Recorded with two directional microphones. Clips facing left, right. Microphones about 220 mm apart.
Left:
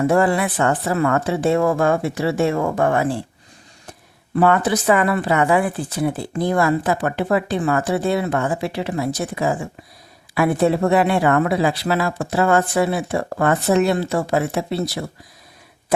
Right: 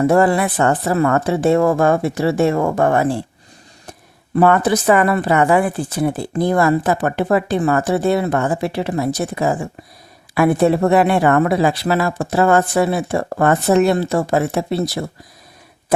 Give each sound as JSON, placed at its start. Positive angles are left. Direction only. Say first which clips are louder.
{"t": 0.1, "sound": "speech", "louder": "right 3 dB", "side_deg": -40}
{"t": 4.4, "sound": "speech", "louder": "right 3 dB", "side_deg": -45}